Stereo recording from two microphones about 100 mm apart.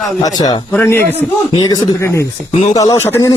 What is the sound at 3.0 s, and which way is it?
Music, 25° left (ahead or behind).